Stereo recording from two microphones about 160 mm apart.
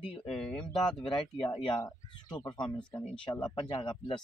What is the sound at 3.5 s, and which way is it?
Speech, 30° left (ahead or behind).